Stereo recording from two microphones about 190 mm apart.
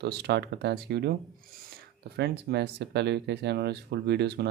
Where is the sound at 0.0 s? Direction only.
60° right (ahead or behind).